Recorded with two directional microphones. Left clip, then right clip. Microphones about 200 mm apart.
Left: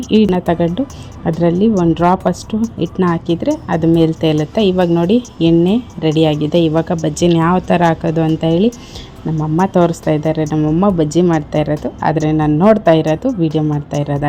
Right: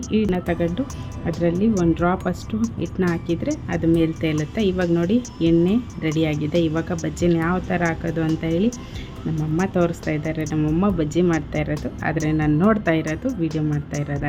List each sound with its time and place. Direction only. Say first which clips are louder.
0.3 s a woman's voice: left 8 dB; 20° left (ahead or behind)